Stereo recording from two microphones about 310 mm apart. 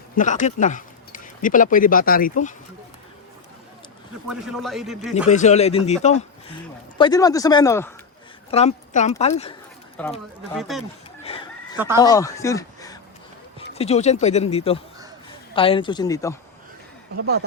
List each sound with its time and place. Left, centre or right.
0.2 s speech: left
4.3 s a man's voice: centre
5.1 s speech: left
8.4 s speech: left
10.0 s a man's voice: centre
11.3 s a sound: centre
11.9 s speech: centre
17.2 s speech: right